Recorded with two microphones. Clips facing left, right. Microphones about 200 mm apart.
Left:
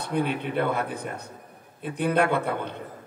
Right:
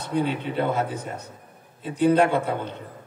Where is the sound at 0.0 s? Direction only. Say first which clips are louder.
Right 1 dB; 55° left (ahead or behind).